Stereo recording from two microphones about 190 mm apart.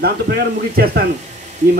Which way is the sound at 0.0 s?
55° right (ahead or behind).